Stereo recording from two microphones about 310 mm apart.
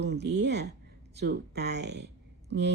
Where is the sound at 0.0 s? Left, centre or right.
Right.